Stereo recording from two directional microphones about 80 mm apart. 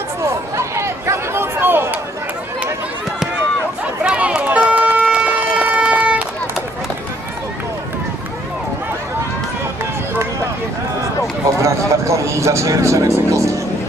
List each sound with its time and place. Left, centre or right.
0.2 s chatter: right
4.0 s run: centre
11.4 s vehicle: right